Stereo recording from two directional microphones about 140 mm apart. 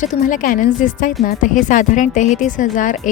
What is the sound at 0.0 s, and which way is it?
A woman's voice, 65° left (ahead or behind).